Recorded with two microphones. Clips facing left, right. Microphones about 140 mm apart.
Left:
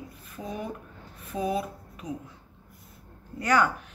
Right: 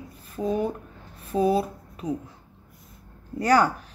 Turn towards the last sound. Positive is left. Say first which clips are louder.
# right 4 dB
turn(degrees=-35)  # may be behind; listen again after turning